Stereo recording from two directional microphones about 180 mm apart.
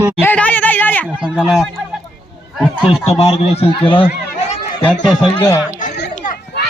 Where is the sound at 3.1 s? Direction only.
35° left (ahead or behind).